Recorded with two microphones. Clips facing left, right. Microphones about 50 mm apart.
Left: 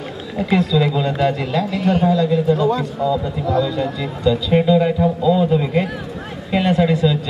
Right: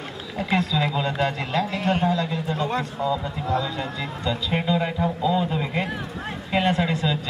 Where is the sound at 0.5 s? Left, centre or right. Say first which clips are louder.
Left 6 dB; right.